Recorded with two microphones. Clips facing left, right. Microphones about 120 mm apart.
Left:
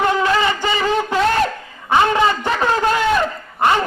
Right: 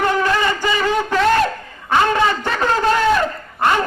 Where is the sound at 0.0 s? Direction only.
20° left (ahead or behind).